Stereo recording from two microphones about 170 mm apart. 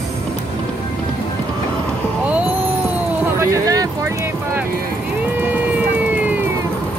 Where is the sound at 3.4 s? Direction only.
20° right (ahead or behind).